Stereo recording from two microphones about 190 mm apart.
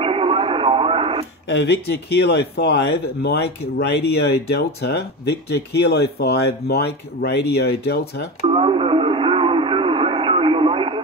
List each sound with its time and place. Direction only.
0.0 s radio: 30° right (ahead or behind)
1.5 s speech: 60° left (ahead or behind)
8.5 s radio: 30° right (ahead or behind)